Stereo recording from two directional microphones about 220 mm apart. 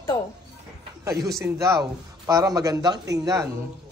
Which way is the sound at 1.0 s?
15° right (ahead or behind).